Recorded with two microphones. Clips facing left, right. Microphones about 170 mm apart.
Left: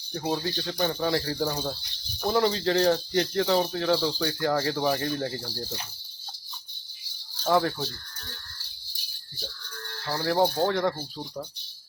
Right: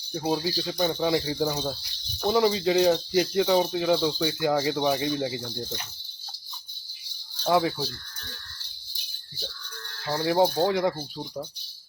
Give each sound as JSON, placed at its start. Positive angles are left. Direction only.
{"t": 0.4, "sound": "speech", "side_deg": -10}
{"t": 5.4, "sound": "speech", "side_deg": 5}
{"t": 7.4, "sound": "speech", "side_deg": -5}
{"t": 10.1, "sound": "speech", "side_deg": -10}